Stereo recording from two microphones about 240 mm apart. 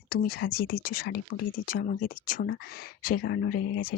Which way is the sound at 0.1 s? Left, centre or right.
Left.